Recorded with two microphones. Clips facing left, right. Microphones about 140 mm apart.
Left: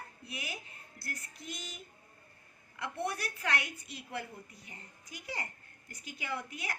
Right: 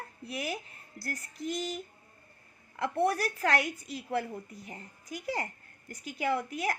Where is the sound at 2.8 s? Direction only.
45° right (ahead or behind).